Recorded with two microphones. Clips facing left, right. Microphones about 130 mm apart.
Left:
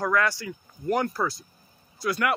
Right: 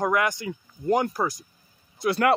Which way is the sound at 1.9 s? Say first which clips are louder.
Right 4 dB; 25° right (ahead or behind).